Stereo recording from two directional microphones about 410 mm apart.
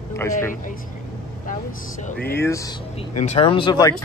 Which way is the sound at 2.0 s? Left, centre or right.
Left.